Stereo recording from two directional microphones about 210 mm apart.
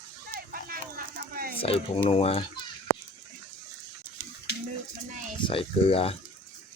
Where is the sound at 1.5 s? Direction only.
25° left (ahead or behind).